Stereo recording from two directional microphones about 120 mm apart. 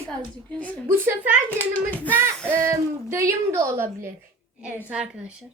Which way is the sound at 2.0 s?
20° right (ahead or behind).